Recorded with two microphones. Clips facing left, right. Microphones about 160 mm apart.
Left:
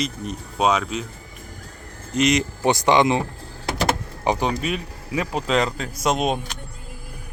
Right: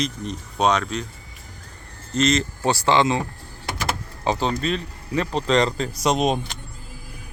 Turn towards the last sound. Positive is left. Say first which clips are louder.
# right 1 dB
turn(degrees=0)  # may be behind; listen again after turning